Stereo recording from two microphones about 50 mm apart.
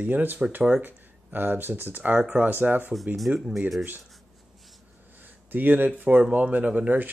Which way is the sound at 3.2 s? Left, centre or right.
Centre.